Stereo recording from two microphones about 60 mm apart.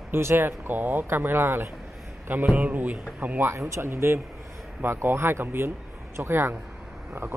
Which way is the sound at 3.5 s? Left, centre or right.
Right.